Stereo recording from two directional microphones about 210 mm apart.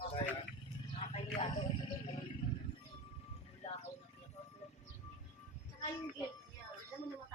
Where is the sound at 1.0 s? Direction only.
35° left (ahead or behind).